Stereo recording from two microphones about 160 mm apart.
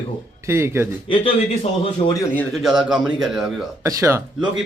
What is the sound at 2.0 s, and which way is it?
Speech, 25° left (ahead or behind).